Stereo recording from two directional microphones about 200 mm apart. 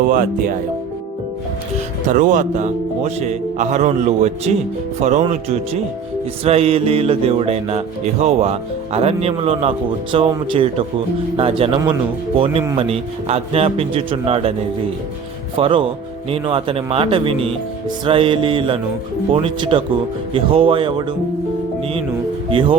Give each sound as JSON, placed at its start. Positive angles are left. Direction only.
{"t": 0.1, "sound": "speech", "side_deg": -45}
{"t": 2.0, "sound": "music", "side_deg": -40}
{"t": 11.3, "sound": "a man's voice", "side_deg": -30}
{"t": 15.5, "sound": "a man's voice", "side_deg": -25}
{"t": 22.4, "sound": "a man's voice", "side_deg": -25}